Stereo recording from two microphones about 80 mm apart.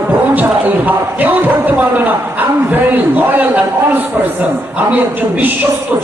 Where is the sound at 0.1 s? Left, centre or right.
Right.